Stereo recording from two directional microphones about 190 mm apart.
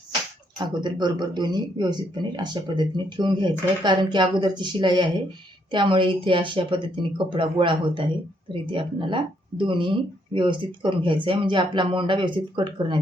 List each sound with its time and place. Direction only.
0.6 s speech: 25° right (ahead or behind)